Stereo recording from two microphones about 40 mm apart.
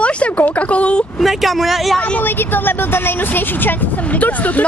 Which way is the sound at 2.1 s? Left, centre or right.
Left.